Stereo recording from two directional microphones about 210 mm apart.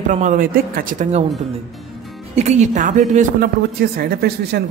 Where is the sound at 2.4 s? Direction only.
35° right (ahead or behind).